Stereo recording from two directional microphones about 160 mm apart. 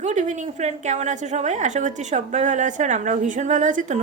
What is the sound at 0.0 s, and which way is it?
A woman's voice, 45° right (ahead or behind).